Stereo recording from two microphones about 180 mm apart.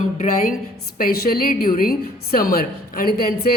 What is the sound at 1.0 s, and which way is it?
A woman's voice, 60° left (ahead or behind).